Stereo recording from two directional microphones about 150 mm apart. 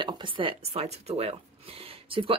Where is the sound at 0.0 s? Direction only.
35° right (ahead or behind).